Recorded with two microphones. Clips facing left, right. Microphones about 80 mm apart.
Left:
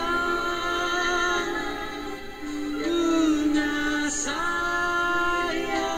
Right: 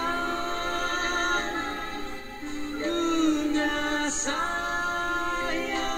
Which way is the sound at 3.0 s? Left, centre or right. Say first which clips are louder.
Left 3 dB; left.